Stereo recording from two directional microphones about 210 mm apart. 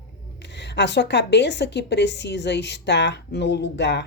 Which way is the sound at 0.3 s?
55° left (ahead or behind).